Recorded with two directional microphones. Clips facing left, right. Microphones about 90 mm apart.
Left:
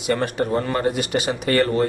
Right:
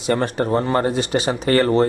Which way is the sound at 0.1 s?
35° right (ahead or behind).